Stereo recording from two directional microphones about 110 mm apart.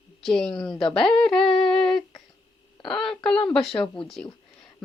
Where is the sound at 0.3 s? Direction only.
5° left (ahead or behind).